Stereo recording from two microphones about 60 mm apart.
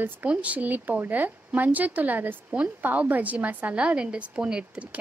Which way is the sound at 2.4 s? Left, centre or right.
Centre.